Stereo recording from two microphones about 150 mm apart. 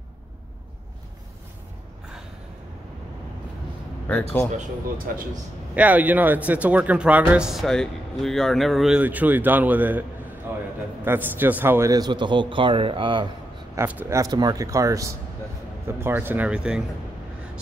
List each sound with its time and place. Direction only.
4.1 s speech: 15° left (ahead or behind)
4.5 s speech: 70° right (ahead or behind)
5.8 s speech: 10° right (ahead or behind)
11.1 s speech: 15° right (ahead or behind); by 13.3 s 35° right (ahead or behind)
13.7 s speech: 15° right (ahead or behind)